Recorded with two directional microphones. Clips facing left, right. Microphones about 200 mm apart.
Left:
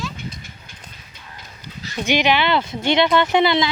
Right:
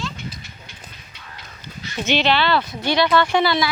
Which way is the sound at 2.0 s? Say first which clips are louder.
Left 1 dB; 15° left (ahead or behind).